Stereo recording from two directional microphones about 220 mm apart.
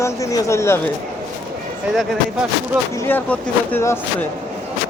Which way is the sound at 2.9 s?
10° left (ahead or behind).